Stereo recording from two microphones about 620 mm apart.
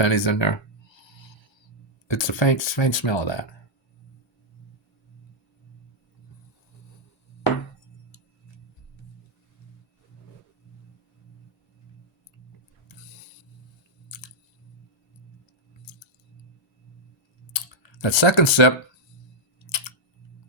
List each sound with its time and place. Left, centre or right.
0.0 s speech: left
2.0 s speech: left
17.5 s typing: left